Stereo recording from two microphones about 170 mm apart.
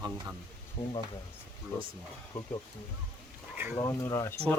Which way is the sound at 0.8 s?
35° left (ahead or behind).